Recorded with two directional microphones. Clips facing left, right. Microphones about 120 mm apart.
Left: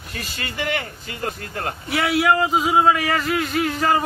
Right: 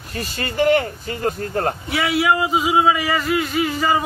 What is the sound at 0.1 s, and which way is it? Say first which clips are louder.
Speech: right 5 dB; 40° right (ahead or behind).